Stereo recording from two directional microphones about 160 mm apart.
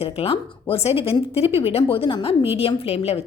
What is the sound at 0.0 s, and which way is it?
A woman's voice, 40° left (ahead or behind).